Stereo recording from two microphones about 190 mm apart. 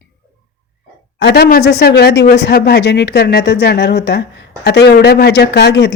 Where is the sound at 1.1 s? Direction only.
60° left (ahead or behind).